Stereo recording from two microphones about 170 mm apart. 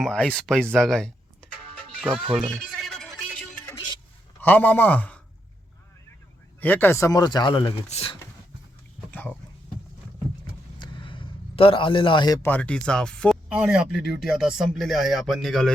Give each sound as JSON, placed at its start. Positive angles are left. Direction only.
{"t": 0.0, "sound": "speech", "side_deg": 5}
{"t": 2.5, "sound": "music", "side_deg": 0}
{"t": 4.4, "sound": "a man's voice", "side_deg": 10}
{"t": 6.6, "sound": "speech", "side_deg": 10}
{"t": 10.8, "sound": "a sound", "side_deg": 30}
{"t": 12.5, "sound": "speech", "side_deg": 10}